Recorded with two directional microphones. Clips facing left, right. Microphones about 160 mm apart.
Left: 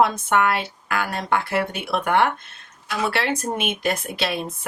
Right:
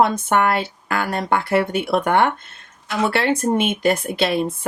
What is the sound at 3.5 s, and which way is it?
Speech, 35° right (ahead or behind).